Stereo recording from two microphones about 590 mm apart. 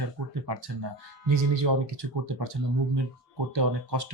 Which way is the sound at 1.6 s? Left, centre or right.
Right.